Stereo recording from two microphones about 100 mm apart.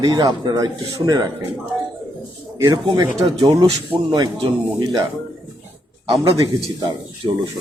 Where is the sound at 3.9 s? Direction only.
50° right (ahead or behind).